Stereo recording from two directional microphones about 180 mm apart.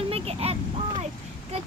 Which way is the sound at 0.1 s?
35° right (ahead or behind).